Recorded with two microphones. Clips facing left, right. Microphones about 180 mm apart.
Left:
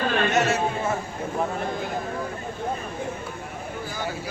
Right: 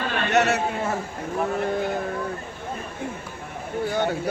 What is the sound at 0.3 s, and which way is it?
Chatter, 65° right (ahead or behind).